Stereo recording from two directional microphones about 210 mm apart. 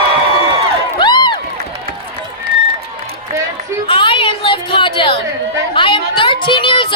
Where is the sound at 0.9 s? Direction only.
20° left (ahead or behind).